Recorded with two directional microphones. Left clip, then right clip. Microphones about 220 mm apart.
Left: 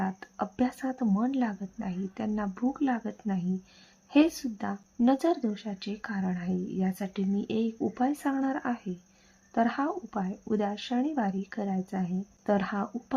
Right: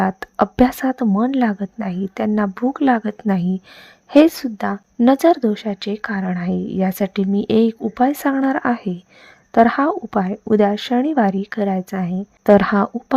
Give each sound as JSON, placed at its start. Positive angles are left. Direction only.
{"t": 0.0, "sound": "speech", "side_deg": -45}